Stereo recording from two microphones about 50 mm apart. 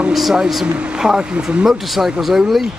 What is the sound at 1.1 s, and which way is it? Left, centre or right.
Speech, centre.